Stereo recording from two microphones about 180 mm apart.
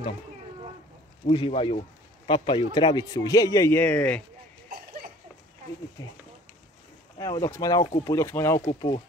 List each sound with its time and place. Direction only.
1.3 s a man's voice: 30° left (ahead or behind); by 4.2 s 10° left (ahead or behind)
4.6 s a sound: 55° right (ahead or behind)
6.0 s a man's voice: 20° left (ahead or behind)
7.2 s a man's voice: 20° left (ahead or behind)